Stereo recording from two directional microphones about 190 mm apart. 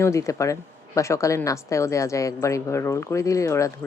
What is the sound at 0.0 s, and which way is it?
A woman's voice, 15° left (ahead or behind).